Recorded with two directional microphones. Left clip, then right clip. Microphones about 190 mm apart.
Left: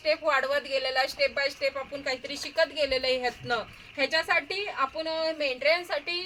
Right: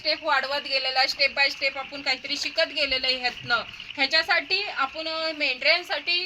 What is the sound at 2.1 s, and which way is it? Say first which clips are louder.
Speech: right 9 dB; 50° left (ahead or behind).